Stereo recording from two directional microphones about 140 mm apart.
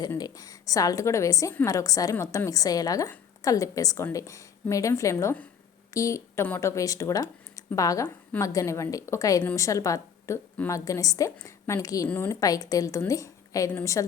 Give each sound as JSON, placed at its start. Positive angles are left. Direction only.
{"t": 0.2, "sound": "a woman's voice", "side_deg": 25}
{"t": 12.0, "sound": "a woman's voice", "side_deg": 15}
{"t": 12.4, "sound": "a woman's voice", "side_deg": 25}